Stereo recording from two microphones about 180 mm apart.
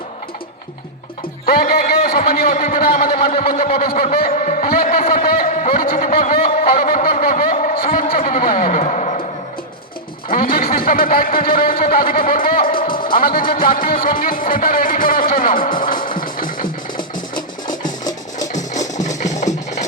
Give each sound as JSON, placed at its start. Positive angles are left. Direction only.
{"t": 1.5, "sound": "a man's voice", "side_deg": 55}
{"t": 6.4, "sound": "a sound", "side_deg": 35}
{"t": 6.8, "sound": "a man's voice", "side_deg": 50}
{"t": 10.2, "sound": "a man's voice", "side_deg": 50}
{"t": 12.6, "sound": "music", "side_deg": 50}
{"t": 13.6, "sound": "speech", "side_deg": 50}
{"t": 17.8, "sound": "a sound", "side_deg": 20}
{"t": 18.4, "sound": "music", "side_deg": 40}